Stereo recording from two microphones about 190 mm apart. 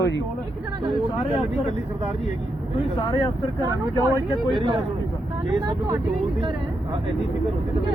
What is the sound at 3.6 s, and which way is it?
Speech, 15° right (ahead or behind).